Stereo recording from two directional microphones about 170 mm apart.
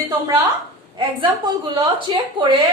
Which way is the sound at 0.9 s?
30° right (ahead or behind).